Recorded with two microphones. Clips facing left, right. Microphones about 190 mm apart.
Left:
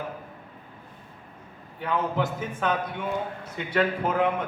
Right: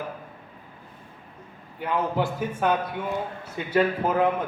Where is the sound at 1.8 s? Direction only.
10° right (ahead or behind).